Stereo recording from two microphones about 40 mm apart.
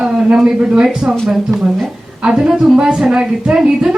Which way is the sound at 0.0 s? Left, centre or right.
Centre.